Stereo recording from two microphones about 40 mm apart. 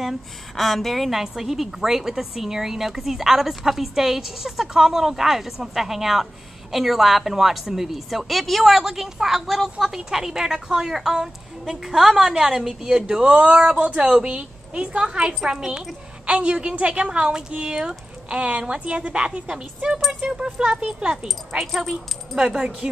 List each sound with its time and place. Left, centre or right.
0.6 s a woman's voice: centre
16.3 s a woman's voice: right
21.5 s a woman's voice: centre
22.3 s a woman's voice: centre
22.6 s a woman's voice: right